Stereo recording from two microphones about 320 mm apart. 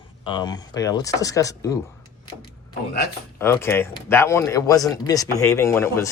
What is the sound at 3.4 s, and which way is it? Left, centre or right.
Speech, centre.